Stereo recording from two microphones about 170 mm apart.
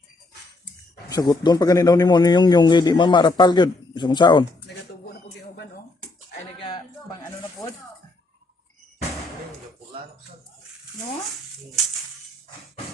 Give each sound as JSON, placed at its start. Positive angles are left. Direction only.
{"t": 1.1, "sound": "a man's voice", "side_deg": 20}
{"t": 5.0, "sound": "music", "side_deg": 70}
{"t": 7.6, "sound": "music", "side_deg": 0}